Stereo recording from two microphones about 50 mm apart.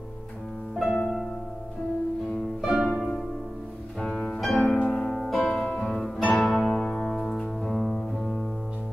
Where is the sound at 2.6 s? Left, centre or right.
Centre.